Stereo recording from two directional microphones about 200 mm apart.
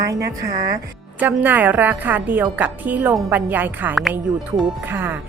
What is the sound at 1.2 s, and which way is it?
Speech, 10° right (ahead or behind).